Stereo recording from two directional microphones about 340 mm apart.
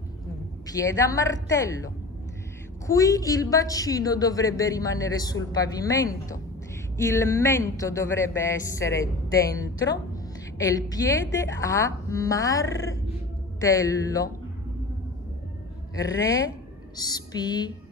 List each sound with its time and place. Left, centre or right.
0.7 s speech: centre
2.9 s speech: centre
16.0 s speech: centre